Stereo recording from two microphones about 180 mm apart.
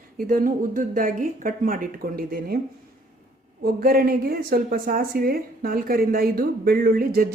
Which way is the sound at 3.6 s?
55° right (ahead or behind).